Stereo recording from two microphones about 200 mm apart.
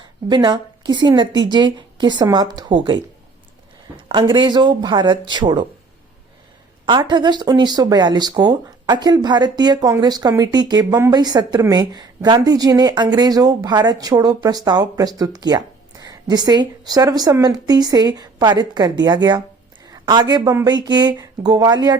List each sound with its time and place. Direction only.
0.3 s speech: 20° right (ahead or behind)
6.8 s speech: 20° right (ahead or behind)